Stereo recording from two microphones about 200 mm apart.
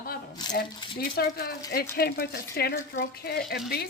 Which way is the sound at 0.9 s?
50° left (ahead or behind).